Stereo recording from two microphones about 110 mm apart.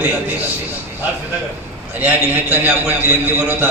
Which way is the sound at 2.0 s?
20° right (ahead or behind).